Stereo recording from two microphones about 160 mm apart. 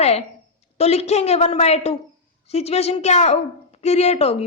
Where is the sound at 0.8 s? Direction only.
40° left (ahead or behind).